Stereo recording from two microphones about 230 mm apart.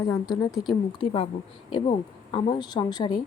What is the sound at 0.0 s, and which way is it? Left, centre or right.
A woman's voice, centre.